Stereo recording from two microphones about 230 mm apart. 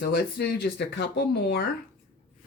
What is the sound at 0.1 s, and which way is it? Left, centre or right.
Speech, left.